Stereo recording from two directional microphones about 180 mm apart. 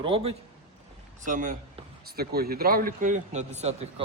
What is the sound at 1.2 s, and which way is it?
Speech, 45° right (ahead or behind).